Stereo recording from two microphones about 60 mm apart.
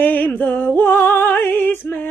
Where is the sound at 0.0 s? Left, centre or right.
Left.